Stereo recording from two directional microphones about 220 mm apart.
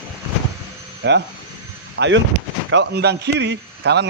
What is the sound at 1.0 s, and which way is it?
A man's voice, 55° right (ahead or behind).